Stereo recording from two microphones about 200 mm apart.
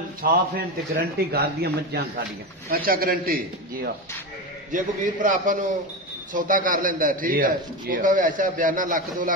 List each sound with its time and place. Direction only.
0.2 s a man's voice: 45° right (ahead or behind)